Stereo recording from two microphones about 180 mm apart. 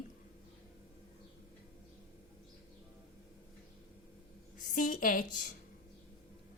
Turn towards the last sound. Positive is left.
turn(degrees=45)  # may be behind; listen again after turning